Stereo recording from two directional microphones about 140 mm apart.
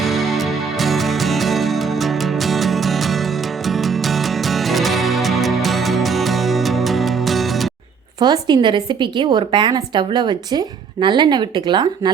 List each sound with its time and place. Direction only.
0.0 s music: centre (ahead or behind)
8.2 s a woman's voice: 30° right (ahead or behind)